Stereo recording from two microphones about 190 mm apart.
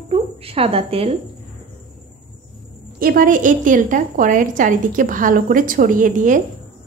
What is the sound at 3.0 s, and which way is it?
A woman's voice, 50° right (ahead or behind).